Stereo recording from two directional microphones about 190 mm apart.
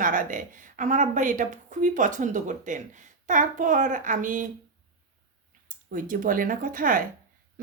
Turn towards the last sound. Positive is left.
turn(degrees=-45)  # may be behind; listen again after turning